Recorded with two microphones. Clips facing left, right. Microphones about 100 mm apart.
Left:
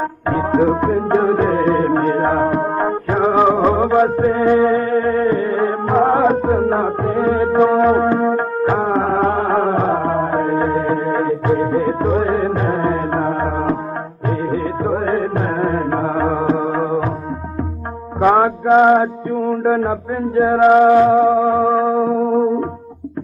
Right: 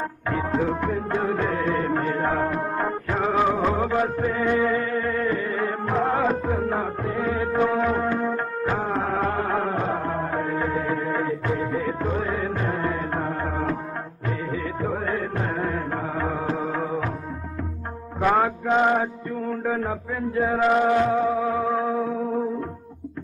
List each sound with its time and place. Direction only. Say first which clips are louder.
0.3 s music: left 9 dB; 40° left (ahead or behind)
18.2 s mantra: left 8 dB; 35° left (ahead or behind)
20.7 s music: left 11 dB; 40° left (ahead or behind)